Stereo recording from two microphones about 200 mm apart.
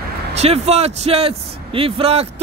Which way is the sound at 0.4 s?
30° right (ahead or behind).